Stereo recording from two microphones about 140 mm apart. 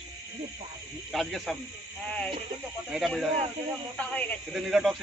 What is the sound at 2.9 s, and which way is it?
Speech, centre (ahead or behind).